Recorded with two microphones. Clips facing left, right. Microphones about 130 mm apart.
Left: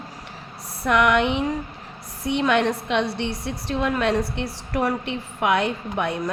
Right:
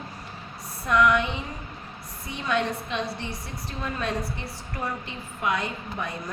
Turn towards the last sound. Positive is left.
turn(degrees=80)